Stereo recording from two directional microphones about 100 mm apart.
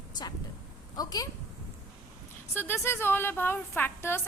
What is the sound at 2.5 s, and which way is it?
A woman's voice, 25° left (ahead or behind).